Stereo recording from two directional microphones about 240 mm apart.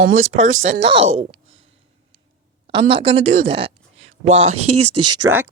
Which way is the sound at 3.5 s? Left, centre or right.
Right.